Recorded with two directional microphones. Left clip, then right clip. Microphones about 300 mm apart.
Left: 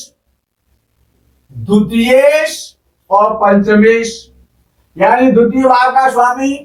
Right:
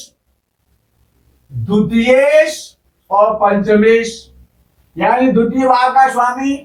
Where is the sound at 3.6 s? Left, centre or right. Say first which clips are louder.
Left 1 dB; left.